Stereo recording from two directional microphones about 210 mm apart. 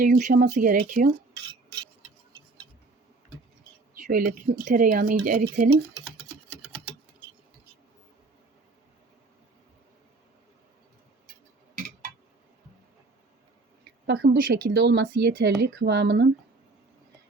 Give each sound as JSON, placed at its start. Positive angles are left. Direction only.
{"t": 0.0, "sound": "speech", "side_deg": -40}
{"t": 3.9, "sound": "speech", "side_deg": -40}
{"t": 11.7, "sound": "a sound", "side_deg": -40}
{"t": 14.1, "sound": "speech", "side_deg": -55}